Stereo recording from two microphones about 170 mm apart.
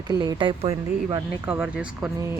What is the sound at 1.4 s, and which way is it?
Speech, 5° right (ahead or behind).